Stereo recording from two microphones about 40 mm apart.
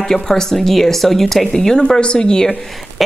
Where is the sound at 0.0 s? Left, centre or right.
Centre.